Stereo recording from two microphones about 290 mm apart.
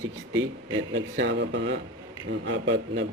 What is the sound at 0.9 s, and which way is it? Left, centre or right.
Speech, right.